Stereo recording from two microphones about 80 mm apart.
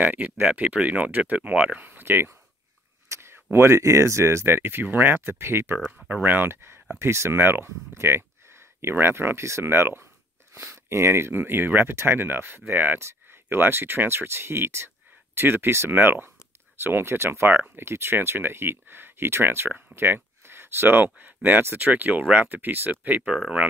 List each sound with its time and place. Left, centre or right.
0.0 s speech: right
3.1 s a sound: right
3.5 s speech: right; by 23.6 s centre